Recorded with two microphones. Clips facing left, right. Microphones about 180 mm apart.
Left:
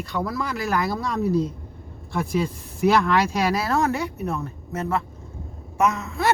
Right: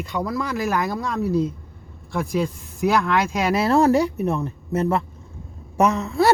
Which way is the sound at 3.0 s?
25° right (ahead or behind).